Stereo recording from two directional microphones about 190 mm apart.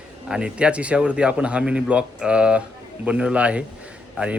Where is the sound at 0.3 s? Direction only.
5° right (ahead or behind).